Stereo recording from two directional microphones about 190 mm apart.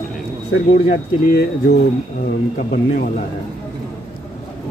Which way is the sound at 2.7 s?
45° left (ahead or behind).